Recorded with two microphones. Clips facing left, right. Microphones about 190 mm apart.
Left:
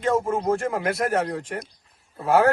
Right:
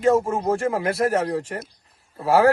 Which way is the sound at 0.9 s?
30° right (ahead or behind).